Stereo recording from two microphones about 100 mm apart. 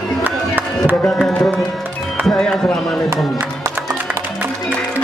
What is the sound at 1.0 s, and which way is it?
Music, 5° left (ahead or behind).